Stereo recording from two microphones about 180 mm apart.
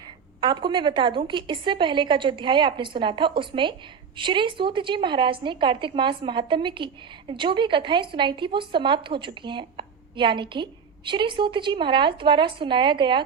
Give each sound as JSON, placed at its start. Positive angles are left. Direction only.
{"t": 0.4, "sound": "a woman's voice", "side_deg": -25}